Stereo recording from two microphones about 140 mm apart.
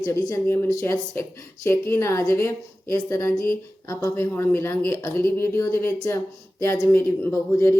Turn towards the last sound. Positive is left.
turn(degrees=20)  # may be behind; listen again after turning